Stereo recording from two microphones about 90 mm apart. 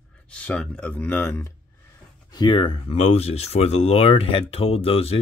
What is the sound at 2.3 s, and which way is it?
Speech, 55° left (ahead or behind).